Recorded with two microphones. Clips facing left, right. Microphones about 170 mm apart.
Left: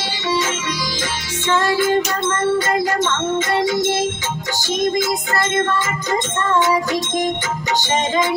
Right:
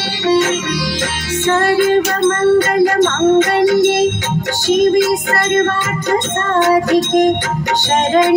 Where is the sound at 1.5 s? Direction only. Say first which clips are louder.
Right 4 dB; 60° right (ahead or behind).